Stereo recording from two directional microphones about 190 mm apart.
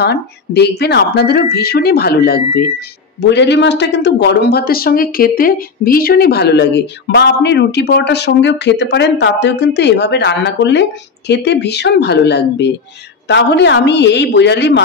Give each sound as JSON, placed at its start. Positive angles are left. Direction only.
{"t": 0.0, "sound": "speech", "side_deg": 60}
{"t": 3.2, "sound": "speech", "side_deg": 65}